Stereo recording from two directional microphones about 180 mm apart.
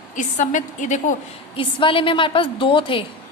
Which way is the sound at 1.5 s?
30° left (ahead or behind).